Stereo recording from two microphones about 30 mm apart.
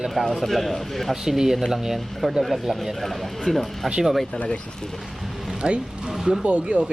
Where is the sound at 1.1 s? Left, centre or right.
Centre.